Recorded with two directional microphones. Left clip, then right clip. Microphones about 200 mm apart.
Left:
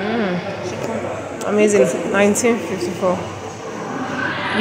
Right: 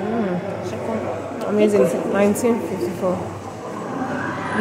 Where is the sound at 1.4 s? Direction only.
Centre (ahead or behind).